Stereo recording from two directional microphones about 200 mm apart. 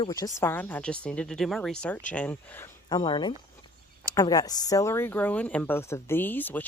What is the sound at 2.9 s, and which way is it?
Speech, 20° left (ahead or behind).